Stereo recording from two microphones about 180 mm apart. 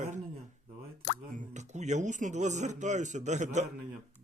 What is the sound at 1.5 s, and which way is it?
Speech, 40° right (ahead or behind).